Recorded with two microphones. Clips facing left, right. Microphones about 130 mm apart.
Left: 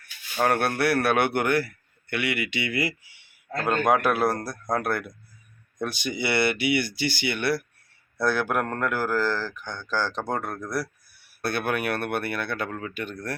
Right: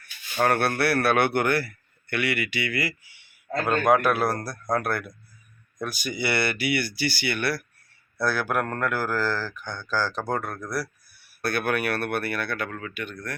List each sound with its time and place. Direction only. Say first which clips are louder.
0.3 s a man's voice: right 1 dB; 5° left (ahead or behind)
9.6 s speech: right 1 dB; 10° right (ahead or behind)
9.9 s a man's voice: right 1 dB; 20° left (ahead or behind); by 13.3 s 35° left (ahead or behind)